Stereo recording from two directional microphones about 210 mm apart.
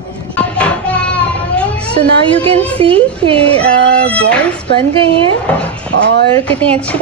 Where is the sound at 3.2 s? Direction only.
25° right (ahead or behind).